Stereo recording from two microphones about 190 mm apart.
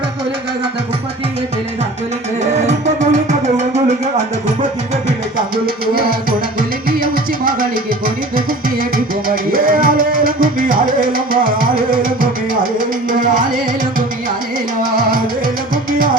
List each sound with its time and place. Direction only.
2.5 s music: 35° right (ahead or behind)
5.6 s music: 50° right (ahead or behind)
15.7 s music: 45° right (ahead or behind)